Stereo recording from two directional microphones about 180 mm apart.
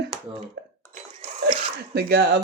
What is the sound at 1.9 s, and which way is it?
Speech, 60° right (ahead or behind).